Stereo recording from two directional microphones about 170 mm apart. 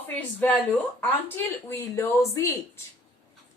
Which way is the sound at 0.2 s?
10° left (ahead or behind).